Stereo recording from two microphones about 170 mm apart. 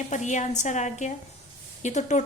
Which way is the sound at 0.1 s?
45° left (ahead or behind).